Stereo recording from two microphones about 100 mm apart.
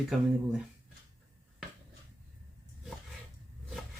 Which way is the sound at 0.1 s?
5° right (ahead or behind).